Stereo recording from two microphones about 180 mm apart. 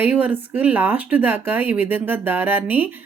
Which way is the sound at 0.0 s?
10° right (ahead or behind).